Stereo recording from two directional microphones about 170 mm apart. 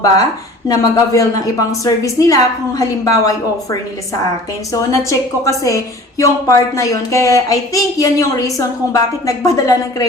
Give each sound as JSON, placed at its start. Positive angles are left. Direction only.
{"t": 0.7, "sound": "a woman's voice", "side_deg": 20}